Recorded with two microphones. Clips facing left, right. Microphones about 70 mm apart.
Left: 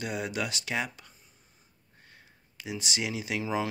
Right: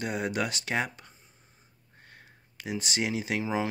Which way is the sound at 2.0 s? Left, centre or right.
Right.